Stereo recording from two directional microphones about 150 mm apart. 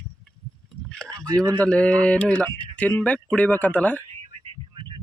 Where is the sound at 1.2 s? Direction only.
25° right (ahead or behind).